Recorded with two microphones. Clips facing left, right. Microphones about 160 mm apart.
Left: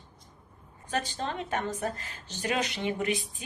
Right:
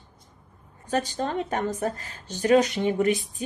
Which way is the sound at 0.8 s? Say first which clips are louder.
Right 6 dB; 45° right (ahead or behind).